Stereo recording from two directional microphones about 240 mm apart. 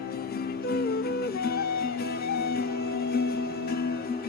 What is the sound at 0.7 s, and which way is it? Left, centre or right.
Music, left.